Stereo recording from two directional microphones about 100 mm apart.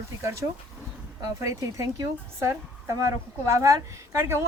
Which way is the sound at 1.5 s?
35° right (ahead or behind).